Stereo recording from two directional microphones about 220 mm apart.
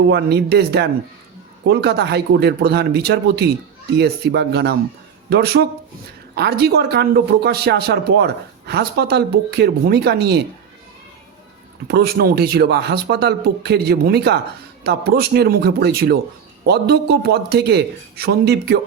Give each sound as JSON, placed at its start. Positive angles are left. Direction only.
{"t": 0.1, "sound": "speech", "side_deg": -50}
{"t": 11.9, "sound": "speech", "side_deg": -45}